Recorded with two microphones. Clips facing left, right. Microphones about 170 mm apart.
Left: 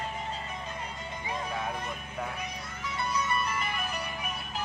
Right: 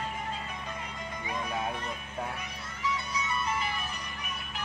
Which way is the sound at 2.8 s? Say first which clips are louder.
Left 1 dB; 60° left (ahead or behind).